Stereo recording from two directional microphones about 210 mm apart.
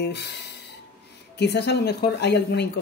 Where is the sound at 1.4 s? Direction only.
50° left (ahead or behind).